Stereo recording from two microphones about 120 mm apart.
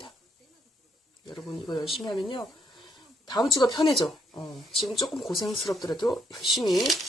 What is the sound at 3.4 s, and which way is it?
Speech, 40° left (ahead or behind).